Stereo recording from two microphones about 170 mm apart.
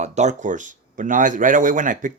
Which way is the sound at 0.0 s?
45° right (ahead or behind).